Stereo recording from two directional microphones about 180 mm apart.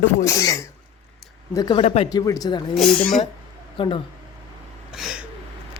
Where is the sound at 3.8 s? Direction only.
30° left (ahead or behind).